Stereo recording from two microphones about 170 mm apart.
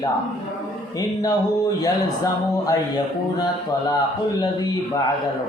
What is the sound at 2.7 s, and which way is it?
Mantra, 25° left (ahead or behind).